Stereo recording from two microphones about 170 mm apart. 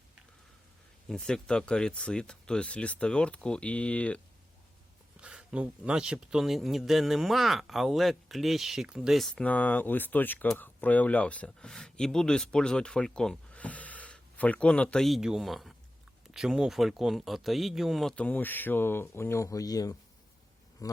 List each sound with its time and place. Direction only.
1.0 s speech: 5° left (ahead or behind)
5.1 s speech: 5° right (ahead or behind); by 21.0 s 20° left (ahead or behind)